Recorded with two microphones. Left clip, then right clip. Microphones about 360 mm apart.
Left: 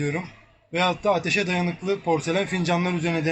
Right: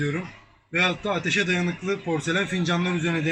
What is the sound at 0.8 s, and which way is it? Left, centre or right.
Speech, centre.